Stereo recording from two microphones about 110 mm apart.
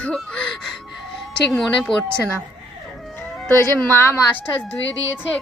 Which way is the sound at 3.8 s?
20° left (ahead or behind).